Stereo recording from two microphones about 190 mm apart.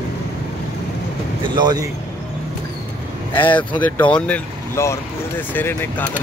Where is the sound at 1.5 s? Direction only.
25° right (ahead or behind).